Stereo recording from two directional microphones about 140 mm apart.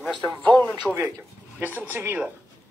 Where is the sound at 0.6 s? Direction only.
15° left (ahead or behind).